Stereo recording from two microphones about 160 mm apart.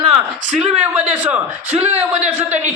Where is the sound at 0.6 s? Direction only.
5° right (ahead or behind).